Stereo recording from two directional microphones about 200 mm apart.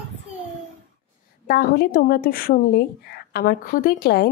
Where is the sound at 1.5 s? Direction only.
50° left (ahead or behind).